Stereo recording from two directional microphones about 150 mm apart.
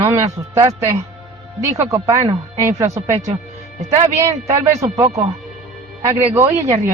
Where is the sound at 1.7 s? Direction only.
20° right (ahead or behind).